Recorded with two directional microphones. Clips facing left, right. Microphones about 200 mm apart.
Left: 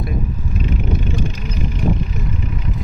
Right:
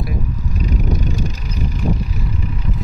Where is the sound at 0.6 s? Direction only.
40° right (ahead or behind).